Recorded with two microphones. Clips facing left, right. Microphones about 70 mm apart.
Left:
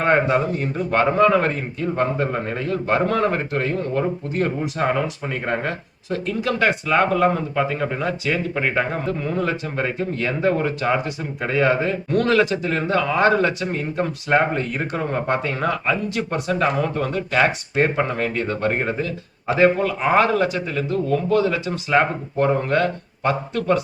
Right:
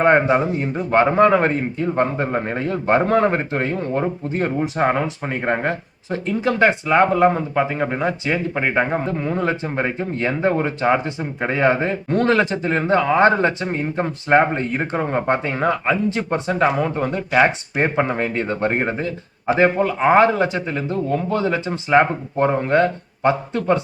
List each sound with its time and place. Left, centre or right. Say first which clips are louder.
0.0 s speech: right 3 dB; right